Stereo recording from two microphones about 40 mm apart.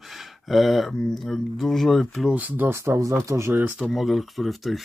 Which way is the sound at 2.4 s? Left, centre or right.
Right.